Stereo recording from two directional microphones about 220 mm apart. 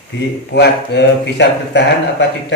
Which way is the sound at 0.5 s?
50° left (ahead or behind).